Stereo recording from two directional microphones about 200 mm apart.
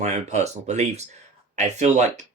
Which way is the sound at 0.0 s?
35° right (ahead or behind).